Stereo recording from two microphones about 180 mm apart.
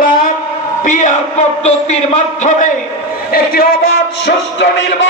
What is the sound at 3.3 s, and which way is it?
Music, 55° left (ahead or behind).